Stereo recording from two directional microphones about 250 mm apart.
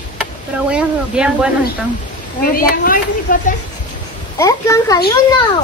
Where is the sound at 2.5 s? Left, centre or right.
Left.